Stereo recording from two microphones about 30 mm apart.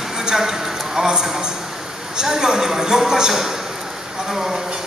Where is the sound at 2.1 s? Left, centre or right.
Centre.